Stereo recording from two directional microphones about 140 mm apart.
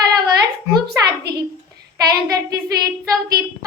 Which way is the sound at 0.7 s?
30° right (ahead or behind).